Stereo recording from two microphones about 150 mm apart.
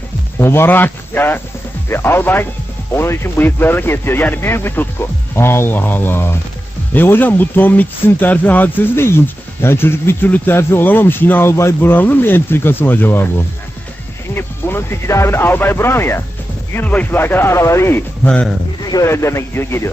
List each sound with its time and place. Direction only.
0.3 s speech: 15° left (ahead or behind)
14.3 s speech: 15° left (ahead or behind)
18.9 s speech: 20° left (ahead or behind)